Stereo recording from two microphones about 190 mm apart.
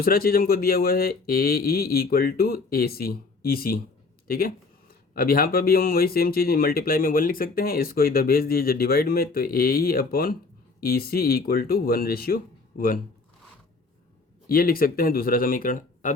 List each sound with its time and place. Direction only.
0.0 s speech: 50° left (ahead or behind)
14.4 s speech: 50° left (ahead or behind)